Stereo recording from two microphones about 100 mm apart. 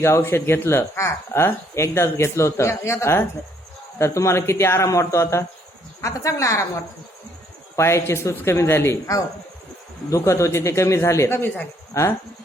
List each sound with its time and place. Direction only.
0.0 s speech: 25° left (ahead or behind)
7.8 s speech: 25° left (ahead or behind)